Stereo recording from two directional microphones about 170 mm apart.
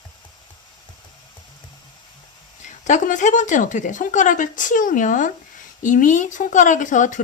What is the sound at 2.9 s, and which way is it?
Speech, 45° left (ahead or behind).